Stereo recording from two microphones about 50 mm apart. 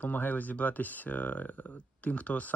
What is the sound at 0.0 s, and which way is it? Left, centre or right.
Speech, left.